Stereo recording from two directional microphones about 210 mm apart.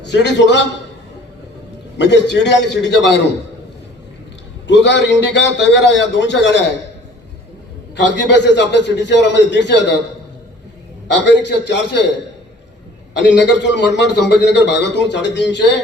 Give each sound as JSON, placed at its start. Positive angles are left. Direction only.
{"t": 0.0, "sound": "a man's voice", "side_deg": 55}
{"t": 2.0, "sound": "a man's voice", "side_deg": 55}
{"t": 4.6, "sound": "a man's voice", "side_deg": 55}
{"t": 7.9, "sound": "a man's voice", "side_deg": 55}
{"t": 11.1, "sound": "a man's voice", "side_deg": 55}
{"t": 13.1, "sound": "a man's voice", "side_deg": 55}